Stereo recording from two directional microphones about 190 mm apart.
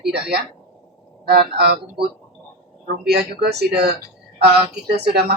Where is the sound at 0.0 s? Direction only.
55° right (ahead or behind).